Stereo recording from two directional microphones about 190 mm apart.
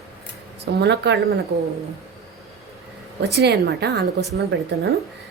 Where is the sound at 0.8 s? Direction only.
65° right (ahead or behind).